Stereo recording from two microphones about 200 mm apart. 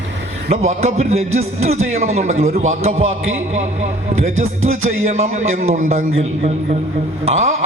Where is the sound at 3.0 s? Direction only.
85° right.